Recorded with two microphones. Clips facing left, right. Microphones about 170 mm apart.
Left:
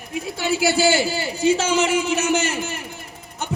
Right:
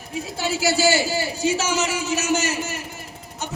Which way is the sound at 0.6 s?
55° left (ahead or behind).